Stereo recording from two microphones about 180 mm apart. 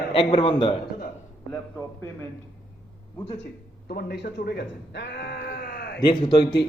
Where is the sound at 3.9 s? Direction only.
60° left (ahead or behind).